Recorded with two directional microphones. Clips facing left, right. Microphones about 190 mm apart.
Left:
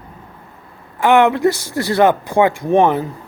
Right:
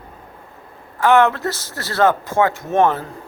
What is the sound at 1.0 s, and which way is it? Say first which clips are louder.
Speech: left 2 dB; 15° left (ahead or behind).